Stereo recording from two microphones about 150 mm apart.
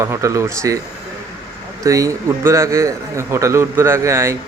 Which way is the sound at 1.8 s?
20° right (ahead or behind).